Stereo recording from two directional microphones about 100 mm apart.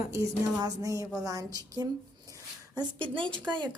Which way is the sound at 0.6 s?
35° right (ahead or behind).